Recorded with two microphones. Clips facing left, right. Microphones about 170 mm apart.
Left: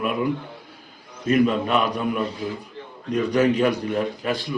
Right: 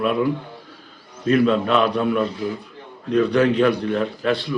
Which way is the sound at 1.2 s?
10° left (ahead or behind).